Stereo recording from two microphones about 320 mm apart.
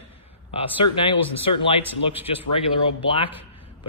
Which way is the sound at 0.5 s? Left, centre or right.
Centre.